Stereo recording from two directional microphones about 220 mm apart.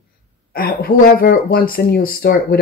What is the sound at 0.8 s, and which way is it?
Speech, 40° left (ahead or behind).